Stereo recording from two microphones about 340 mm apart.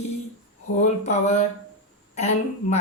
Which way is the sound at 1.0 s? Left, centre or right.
Centre.